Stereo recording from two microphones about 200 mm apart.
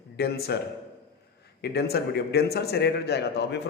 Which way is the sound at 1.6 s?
50° left (ahead or behind).